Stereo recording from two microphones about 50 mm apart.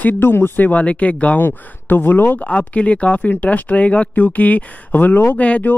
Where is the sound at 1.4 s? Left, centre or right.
Left.